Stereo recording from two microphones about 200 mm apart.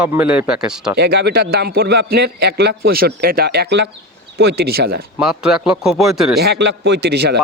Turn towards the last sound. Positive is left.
turn(degrees=-55)  # may be behind; listen again after turning